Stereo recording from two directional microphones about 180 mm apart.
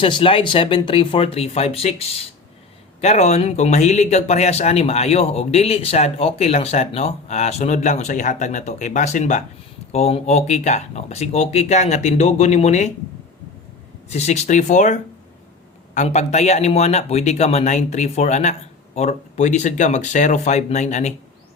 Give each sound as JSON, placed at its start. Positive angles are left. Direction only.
{"t": 0.0, "sound": "speech", "side_deg": 30}
{"t": 14.1, "sound": "speech", "side_deg": 40}
{"t": 16.0, "sound": "speech", "side_deg": 40}